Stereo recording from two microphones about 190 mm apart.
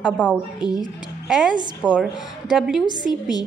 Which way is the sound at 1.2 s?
Centre (ahead or behind).